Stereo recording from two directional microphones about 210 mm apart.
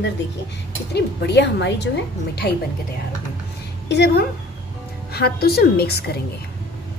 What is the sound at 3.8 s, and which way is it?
A woman's voice, 50° left (ahead or behind).